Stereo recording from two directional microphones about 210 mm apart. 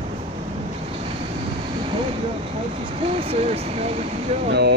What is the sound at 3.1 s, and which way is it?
Speech, 30° right (ahead or behind).